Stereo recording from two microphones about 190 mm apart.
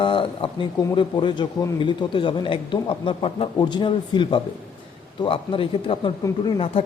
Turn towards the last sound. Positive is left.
turn(degrees=30)  # may be behind; listen again after turning